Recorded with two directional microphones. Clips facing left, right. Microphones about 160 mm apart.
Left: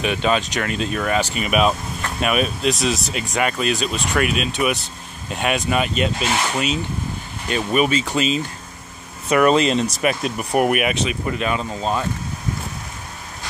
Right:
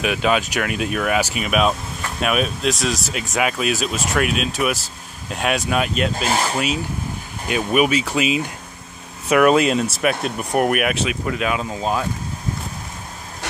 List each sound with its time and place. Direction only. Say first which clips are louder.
0.0 s speech: right 1 dB; 5° right (ahead or behind)
6.1 s speech: right 1 dB; 40° right (ahead or behind)
6.5 s speech: even; 5° right (ahead or behind)